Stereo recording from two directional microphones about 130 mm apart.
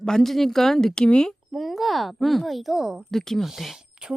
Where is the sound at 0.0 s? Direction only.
5° left (ahead or behind).